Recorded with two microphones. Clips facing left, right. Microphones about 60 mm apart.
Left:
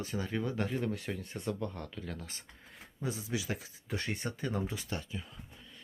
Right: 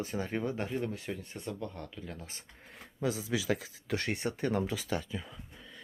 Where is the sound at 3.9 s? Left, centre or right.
Right.